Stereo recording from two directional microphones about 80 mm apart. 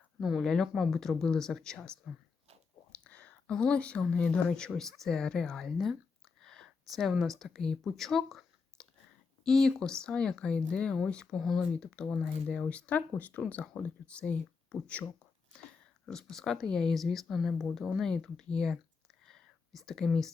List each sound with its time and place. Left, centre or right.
0.2 s speech: centre
0.4 s speech: centre
3.0 s a sound: centre
4.0 s speech: centre
19.2 s whispering: centre